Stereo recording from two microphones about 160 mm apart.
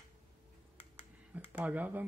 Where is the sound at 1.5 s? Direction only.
10° right (ahead or behind).